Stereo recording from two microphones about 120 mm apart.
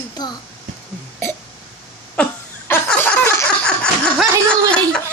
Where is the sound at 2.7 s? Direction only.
15° left (ahead or behind).